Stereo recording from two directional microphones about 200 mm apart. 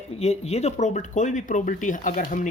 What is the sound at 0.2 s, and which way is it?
Speech, 35° left (ahead or behind).